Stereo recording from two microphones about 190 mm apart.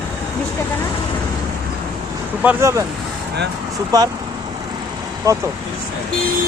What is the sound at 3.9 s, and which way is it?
Speech, 20° right (ahead or behind).